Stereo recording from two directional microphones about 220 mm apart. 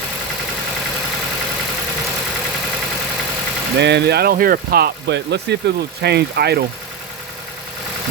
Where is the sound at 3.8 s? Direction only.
50° right (ahead or behind).